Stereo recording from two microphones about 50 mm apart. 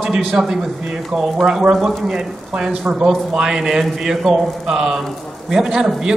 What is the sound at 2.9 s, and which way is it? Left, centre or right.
Speech, right.